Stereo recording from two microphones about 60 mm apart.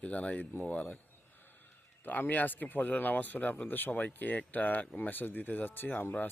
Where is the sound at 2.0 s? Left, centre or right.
Left.